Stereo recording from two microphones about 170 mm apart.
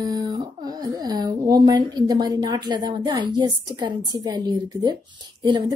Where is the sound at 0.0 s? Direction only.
20° right (ahead or behind).